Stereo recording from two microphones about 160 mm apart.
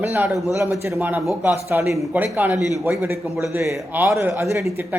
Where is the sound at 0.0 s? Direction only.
15° right (ahead or behind).